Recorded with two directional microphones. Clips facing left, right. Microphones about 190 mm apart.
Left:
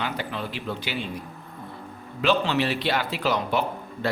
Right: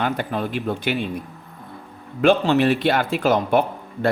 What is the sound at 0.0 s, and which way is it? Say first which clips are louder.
Speech: right 7 dB; 50° right (ahead or behind).